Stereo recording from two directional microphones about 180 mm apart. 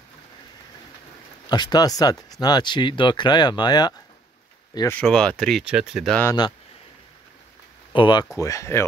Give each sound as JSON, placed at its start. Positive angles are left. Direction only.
{"t": 1.5, "sound": "speech", "side_deg": 20}
{"t": 7.9, "sound": "speech", "side_deg": 25}